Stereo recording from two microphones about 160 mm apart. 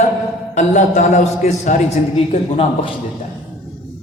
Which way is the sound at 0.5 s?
50° left (ahead or behind).